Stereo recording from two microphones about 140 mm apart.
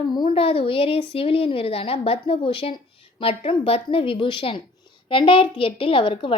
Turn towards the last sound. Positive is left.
turn(degrees=40)  # may be behind; listen again after turning